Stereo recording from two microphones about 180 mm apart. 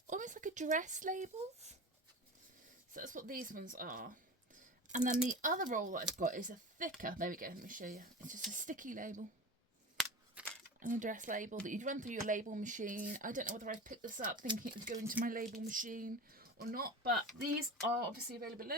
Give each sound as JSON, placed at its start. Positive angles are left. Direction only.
{"t": 0.1, "sound": "speech", "side_deg": -45}
{"t": 2.9, "sound": "speech", "side_deg": -45}
{"t": 10.4, "sound": "crumpling", "side_deg": -5}
{"t": 10.8, "sound": "speech", "side_deg": -45}
{"t": 18.3, "sound": "speech", "side_deg": -55}